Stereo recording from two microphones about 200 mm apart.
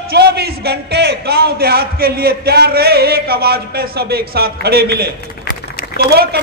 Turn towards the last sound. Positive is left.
turn(degrees=-50)  # may be behind; listen again after turning